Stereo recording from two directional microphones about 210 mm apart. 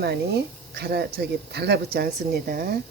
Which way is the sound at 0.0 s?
50° right (ahead or behind).